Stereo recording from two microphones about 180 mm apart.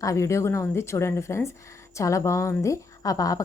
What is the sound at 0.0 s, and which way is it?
A woman's voice, 15° left (ahead or behind).